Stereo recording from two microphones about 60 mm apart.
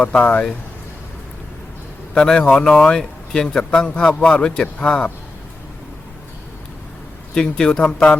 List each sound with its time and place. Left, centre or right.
0.0 s speech: left
2.1 s a man's voice: centre
7.3 s a man's voice: centre